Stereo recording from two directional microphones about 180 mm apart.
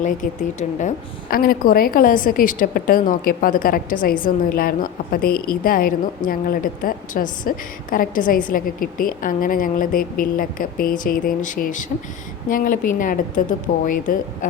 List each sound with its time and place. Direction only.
0.8 s a woman's voice: 50° left (ahead or behind)